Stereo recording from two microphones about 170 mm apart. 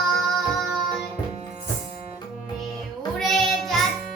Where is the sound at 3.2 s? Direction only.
Centre (ahead or behind).